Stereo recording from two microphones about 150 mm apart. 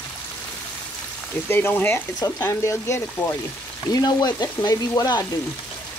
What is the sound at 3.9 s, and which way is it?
Frying, 25° left (ahead or behind).